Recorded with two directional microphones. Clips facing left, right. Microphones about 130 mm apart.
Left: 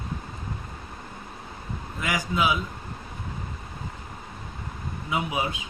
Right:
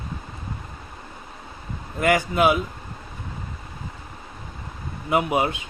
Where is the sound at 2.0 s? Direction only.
60° right (ahead or behind).